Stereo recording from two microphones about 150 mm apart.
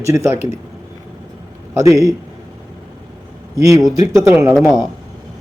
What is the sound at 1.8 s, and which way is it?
Speech, 20° right (ahead or behind).